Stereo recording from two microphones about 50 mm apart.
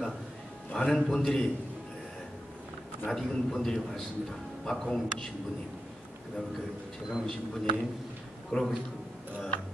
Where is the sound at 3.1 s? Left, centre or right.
Centre.